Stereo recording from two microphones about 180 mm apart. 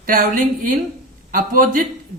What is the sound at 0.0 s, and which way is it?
Speech, 50° right (ahead or behind).